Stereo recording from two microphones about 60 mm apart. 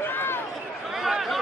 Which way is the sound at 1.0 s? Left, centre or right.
Centre.